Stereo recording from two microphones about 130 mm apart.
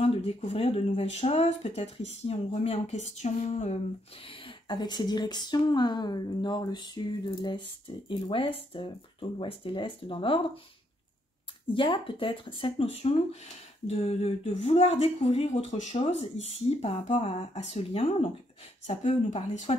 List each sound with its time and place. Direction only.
0.0 s speech: 55° left (ahead or behind)
4.6 s speech: 35° left (ahead or behind)
11.7 s speech: 40° left (ahead or behind)
18.9 s speech: 60° left (ahead or behind)